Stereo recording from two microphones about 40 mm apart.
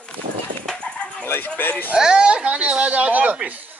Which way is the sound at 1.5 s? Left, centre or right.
Left.